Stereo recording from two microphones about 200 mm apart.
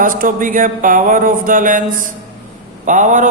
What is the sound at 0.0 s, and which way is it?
A man's voice, 40° right (ahead or behind).